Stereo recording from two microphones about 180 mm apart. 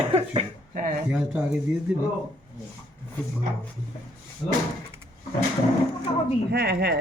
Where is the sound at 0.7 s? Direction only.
50° right (ahead or behind).